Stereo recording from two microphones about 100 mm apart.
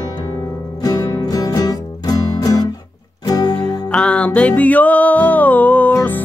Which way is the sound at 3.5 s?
10° left (ahead or behind).